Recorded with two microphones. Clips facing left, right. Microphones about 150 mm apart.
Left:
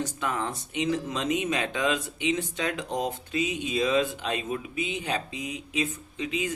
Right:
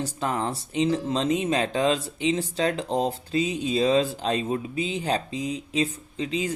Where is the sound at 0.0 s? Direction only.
35° right (ahead or behind).